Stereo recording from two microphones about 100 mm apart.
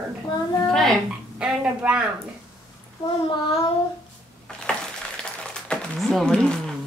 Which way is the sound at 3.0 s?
45° left (ahead or behind).